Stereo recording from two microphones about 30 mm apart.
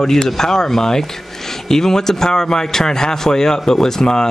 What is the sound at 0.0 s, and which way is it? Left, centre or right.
Speech, centre.